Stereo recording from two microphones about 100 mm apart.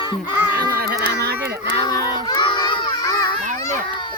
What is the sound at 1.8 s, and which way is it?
Crowd, 45° left (ahead or behind).